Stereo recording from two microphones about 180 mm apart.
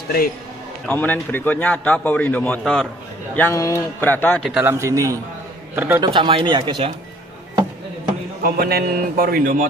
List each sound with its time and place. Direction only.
0.9 s a man's voice: 10° left (ahead or behind)
4.5 s a man's voice: 15° right (ahead or behind)
6.0 s speech: 25° right (ahead or behind)
8.4 s a man's voice: 60° right (ahead or behind)